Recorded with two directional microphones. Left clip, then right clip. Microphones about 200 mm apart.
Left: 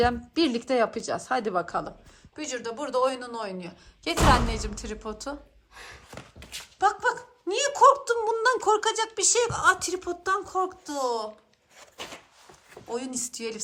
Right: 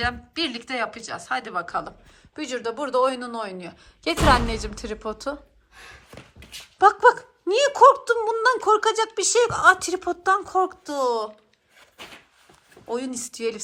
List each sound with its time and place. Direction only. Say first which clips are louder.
0.0 s a woman's voice: left 2 dB; 30° left (ahead or behind)
2.3 s a woman's voice: right 5 dB; 5° left (ahead or behind)
6.1 s a sound: left 1 dB; 5° left (ahead or behind)
6.7 s speech: right 9 dB; centre (ahead or behind)
12.9 s a woman's voice: right 4 dB; 5° left (ahead or behind)